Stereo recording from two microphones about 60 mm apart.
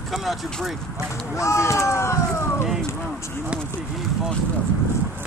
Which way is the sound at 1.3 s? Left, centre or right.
Left.